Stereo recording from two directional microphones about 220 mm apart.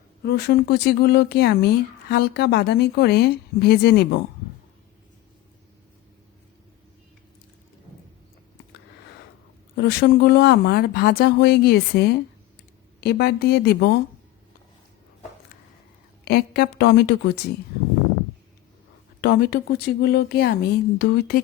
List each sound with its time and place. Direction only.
0.2 s speech: 50° left (ahead or behind)
9.7 s speech: 50° left (ahead or behind)
16.2 s speech: 45° left (ahead or behind)
19.2 s speech: 45° left (ahead or behind)